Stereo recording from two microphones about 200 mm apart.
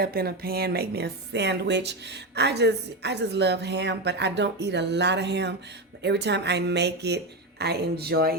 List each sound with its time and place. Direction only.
0.0 s speech: 50° right (ahead or behind)